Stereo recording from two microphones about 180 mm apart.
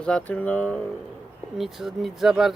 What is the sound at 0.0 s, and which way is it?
Speech, 5° left (ahead or behind).